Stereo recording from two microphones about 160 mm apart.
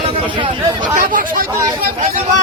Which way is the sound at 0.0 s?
35° right (ahead or behind).